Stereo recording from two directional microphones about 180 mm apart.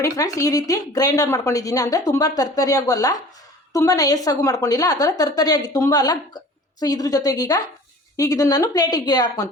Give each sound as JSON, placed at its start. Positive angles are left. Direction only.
{"t": 0.0, "sound": "a woman's voice", "side_deg": 20}